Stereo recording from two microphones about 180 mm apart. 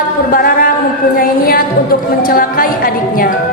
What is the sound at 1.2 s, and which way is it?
A woman's voice, 55° left (ahead or behind).